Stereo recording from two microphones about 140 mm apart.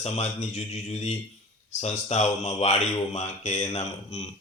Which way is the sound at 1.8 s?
50° left (ahead or behind).